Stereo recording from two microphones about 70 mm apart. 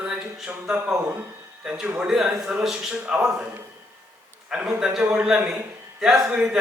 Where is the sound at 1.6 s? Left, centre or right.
Centre.